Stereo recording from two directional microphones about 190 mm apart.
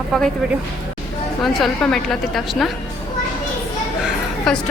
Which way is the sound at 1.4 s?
Centre (ahead or behind).